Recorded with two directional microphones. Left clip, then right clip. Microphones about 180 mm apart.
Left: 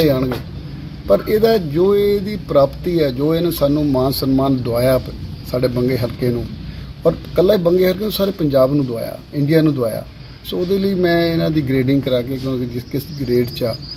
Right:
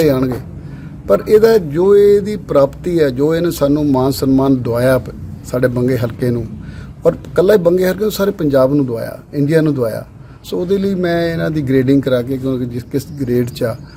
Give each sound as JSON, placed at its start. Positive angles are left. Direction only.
{"t": 0.0, "sound": "speech", "side_deg": -20}